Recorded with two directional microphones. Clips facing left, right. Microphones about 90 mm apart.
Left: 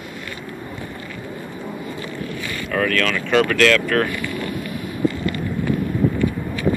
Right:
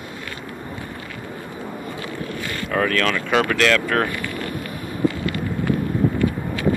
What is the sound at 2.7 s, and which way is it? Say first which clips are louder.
Speech: even; 30° right (ahead or behind).